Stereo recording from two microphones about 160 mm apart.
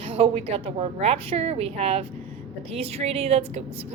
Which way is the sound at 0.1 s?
35° right (ahead or behind).